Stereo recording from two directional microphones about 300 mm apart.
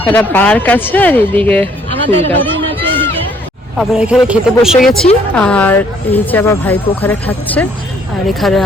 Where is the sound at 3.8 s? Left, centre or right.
Centre.